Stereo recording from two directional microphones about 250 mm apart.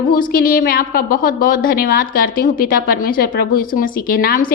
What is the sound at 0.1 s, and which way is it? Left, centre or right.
A woman's voice, left.